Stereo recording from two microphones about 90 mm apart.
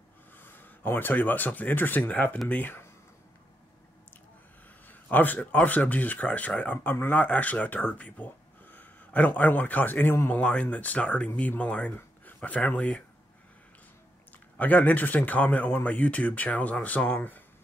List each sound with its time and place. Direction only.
0.4 s speech: 25° left (ahead or behind)
4.8 s speech: 20° left (ahead or behind)
14.6 s speech: 20° left (ahead or behind)